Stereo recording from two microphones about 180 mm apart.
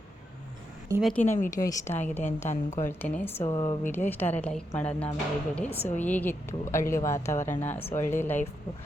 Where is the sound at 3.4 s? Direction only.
25° left (ahead or behind).